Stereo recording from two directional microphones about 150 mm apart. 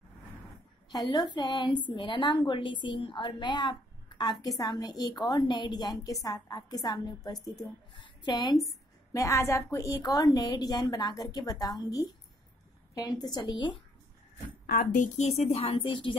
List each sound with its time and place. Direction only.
1.1 s a woman's voice: 25° left (ahead or behind)
14.7 s a woman's voice: 70° left (ahead or behind)
15.1 s a woman's voice: 45° left (ahead or behind)